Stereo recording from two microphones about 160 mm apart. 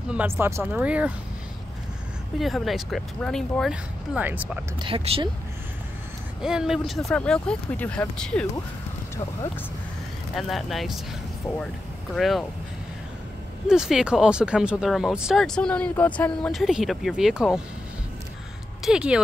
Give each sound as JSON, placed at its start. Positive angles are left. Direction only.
{"t": 0.1, "sound": "speech", "side_deg": -10}
{"t": 2.3, "sound": "speech", "side_deg": 0}
{"t": 4.8, "sound": "speech", "side_deg": -35}
{"t": 6.4, "sound": "speech", "side_deg": -5}
{"t": 10.3, "sound": "speech", "side_deg": 0}
{"t": 13.7, "sound": "speech", "side_deg": -5}
{"t": 18.9, "sound": "speech", "side_deg": -5}